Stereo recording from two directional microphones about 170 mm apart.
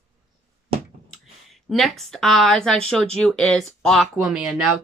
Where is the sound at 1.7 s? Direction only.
Centre (ahead or behind).